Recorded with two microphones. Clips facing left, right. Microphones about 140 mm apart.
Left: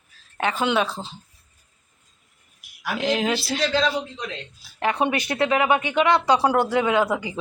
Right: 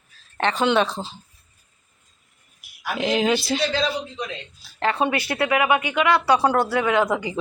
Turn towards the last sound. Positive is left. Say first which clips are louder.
# even
turn(degrees=15)  # may be behind; listen again after turning